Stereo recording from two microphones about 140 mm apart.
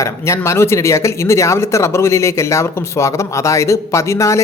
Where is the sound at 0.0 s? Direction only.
20° left (ahead or behind).